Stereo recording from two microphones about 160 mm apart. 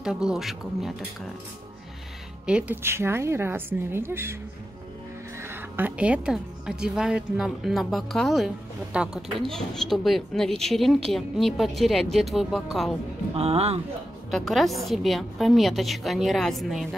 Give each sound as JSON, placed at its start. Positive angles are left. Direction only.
{"t": 0.0, "sound": "speech", "side_deg": -5}
{"t": 2.4, "sound": "a woman's voice", "side_deg": -10}
{"t": 5.4, "sound": "speech", "side_deg": -15}
{"t": 13.3, "sound": "speech", "side_deg": -40}
{"t": 14.3, "sound": "speech", "side_deg": 0}